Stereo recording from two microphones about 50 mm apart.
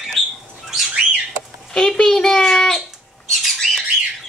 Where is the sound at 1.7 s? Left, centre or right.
Centre.